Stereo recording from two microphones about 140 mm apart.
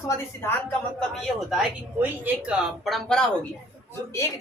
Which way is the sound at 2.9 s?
Centre (ahead or behind).